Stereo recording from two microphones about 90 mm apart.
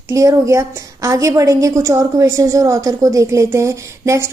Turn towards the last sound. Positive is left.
turn(degrees=-35)  # may be behind; listen again after turning